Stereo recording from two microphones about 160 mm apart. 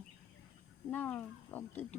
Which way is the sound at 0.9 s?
10° left (ahead or behind).